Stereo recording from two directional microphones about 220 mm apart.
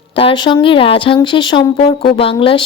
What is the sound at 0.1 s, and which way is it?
Speech, 25° left (ahead or behind).